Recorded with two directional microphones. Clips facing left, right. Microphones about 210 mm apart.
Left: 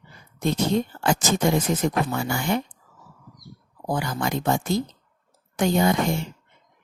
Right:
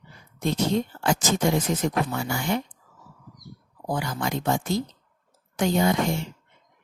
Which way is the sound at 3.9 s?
50° left (ahead or behind).